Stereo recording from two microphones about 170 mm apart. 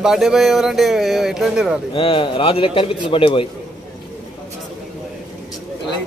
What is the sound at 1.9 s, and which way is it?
A man's voice, 30° left (ahead or behind).